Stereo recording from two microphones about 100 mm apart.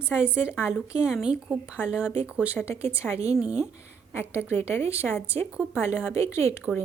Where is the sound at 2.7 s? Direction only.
90° right.